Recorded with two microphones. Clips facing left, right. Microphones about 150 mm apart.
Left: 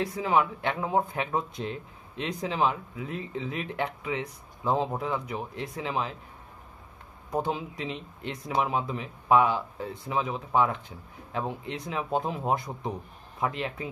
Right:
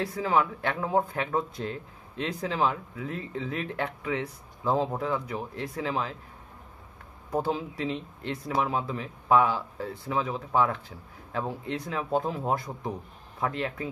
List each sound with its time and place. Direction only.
0.1 s speech: 15° left (ahead or behind)
7.2 s speech: 15° left (ahead or behind)